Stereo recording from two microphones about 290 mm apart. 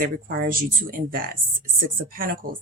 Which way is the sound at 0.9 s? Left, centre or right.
Right.